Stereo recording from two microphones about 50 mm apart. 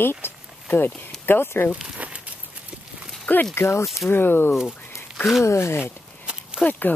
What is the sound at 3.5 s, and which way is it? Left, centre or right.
Speech, left.